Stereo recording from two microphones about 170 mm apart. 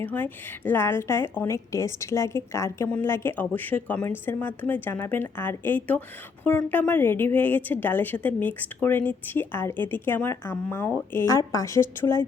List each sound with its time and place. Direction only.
0.0 s a woman's voice: 10° left (ahead or behind)